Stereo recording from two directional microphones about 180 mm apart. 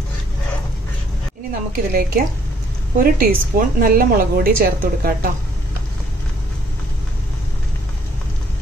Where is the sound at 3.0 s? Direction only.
50° right (ahead or behind).